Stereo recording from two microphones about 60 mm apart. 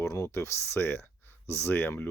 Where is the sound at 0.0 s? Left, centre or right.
Left.